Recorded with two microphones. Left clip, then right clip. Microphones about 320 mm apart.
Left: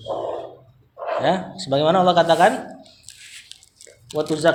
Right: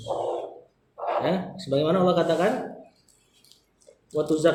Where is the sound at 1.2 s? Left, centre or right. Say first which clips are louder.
Left 6 dB; centre.